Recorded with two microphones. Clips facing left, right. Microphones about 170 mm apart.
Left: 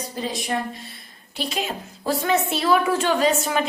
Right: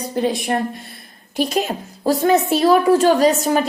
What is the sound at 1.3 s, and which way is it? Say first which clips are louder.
A woman's voice: right 8 dB; 45° right (ahead or behind).